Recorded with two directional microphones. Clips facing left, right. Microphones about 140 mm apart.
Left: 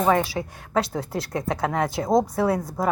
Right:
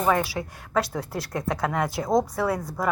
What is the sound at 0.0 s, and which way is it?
Speech, 25° left (ahead or behind).